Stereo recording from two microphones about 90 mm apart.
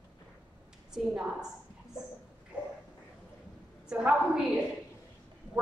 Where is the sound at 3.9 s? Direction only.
10° right (ahead or behind).